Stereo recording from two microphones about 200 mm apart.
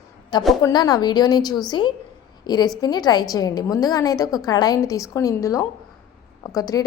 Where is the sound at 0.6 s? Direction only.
20° left (ahead or behind).